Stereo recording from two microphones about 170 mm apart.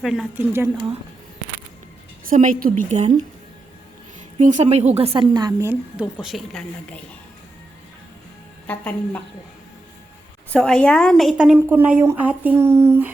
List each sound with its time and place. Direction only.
0.0 s a woman's voice: centre (ahead or behind)
2.3 s a woman's voice: 50° right (ahead or behind)
4.4 s a woman's voice: 45° right (ahead or behind); by 5.7 s 20° right (ahead or behind)
6.0 s a woman's voice: 5° right (ahead or behind)
8.6 s a woman's voice: 10° left (ahead or behind)
10.5 s a woman's voice: 5° left (ahead or behind); by 13.1 s 10° right (ahead or behind)